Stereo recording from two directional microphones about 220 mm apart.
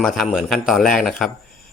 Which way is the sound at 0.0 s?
Centre (ahead or behind).